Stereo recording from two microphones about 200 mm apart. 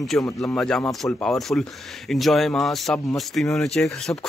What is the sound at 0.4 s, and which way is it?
A man's voice, 5° left (ahead or behind).